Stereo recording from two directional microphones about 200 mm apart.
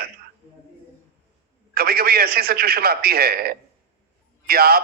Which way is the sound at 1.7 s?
50° right (ahead or behind).